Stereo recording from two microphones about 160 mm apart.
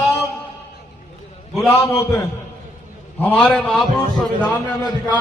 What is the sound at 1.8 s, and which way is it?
A man's voice, 20° left (ahead or behind).